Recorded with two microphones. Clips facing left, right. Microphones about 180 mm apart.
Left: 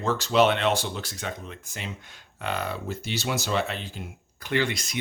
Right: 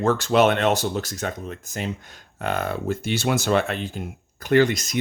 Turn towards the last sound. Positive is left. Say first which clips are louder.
# right 8 dB
turn(degrees=-45)  # may be behind; listen again after turning